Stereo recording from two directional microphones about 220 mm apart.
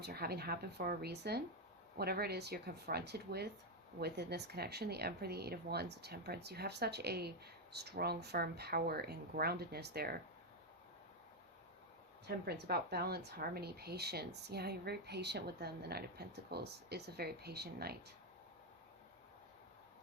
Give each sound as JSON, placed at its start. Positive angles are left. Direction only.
{"t": 0.0, "sound": "speech", "side_deg": -45}
{"t": 12.2, "sound": "speech", "side_deg": -45}